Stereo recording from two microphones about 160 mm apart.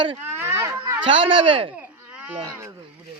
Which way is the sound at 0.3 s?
15° right (ahead or behind).